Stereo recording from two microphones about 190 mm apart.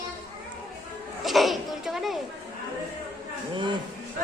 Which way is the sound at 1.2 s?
Centre (ahead or behind).